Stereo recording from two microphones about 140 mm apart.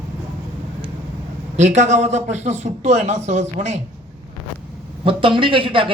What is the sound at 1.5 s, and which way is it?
A man's voice, 55° right (ahead or behind).